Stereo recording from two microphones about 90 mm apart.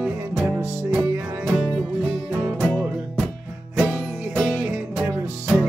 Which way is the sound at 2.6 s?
5° left (ahead or behind).